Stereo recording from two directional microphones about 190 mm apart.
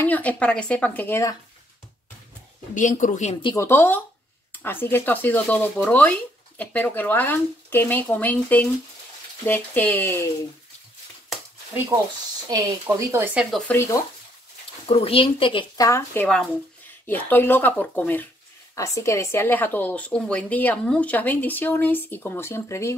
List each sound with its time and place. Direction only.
0.0 s speech: 10° left (ahead or behind)
2.7 s speech: 40° left (ahead or behind)
3.4 s speech: 15° left (ahead or behind)
12.4 s speech: 15° right (ahead or behind)
13.7 s speech: 15° left (ahead or behind)
14.9 s speech: 30° left (ahead or behind)
15.9 s speech: 10° left (ahead or behind)